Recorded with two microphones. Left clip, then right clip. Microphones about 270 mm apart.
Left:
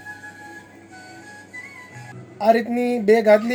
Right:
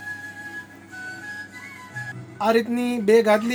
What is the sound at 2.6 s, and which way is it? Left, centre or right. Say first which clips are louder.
Speech: left 3 dB; right.